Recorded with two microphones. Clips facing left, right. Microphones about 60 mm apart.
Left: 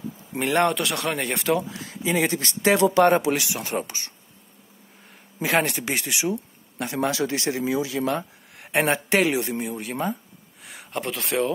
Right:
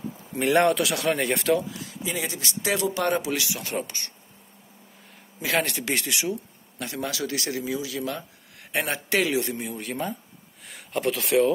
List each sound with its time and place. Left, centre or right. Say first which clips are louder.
0.4 s speech: right 1 dB; centre
1.8 s speech: left 7 dB; left
3.8 s speech: even; centre
5.4 s speech: left 3 dB; left
7.0 s speech: left 5 dB; left
8.5 s speech: left 6 dB; left; by 11.5 s centre